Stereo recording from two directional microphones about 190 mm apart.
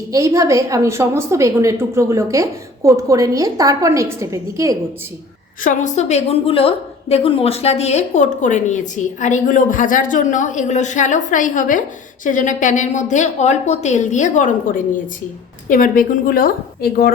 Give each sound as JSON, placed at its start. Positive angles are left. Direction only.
{"t": 0.1, "sound": "a woman's voice", "side_deg": -15}
{"t": 5.6, "sound": "a woman's voice", "side_deg": 40}
{"t": 15.7, "sound": "a woman's voice", "side_deg": 45}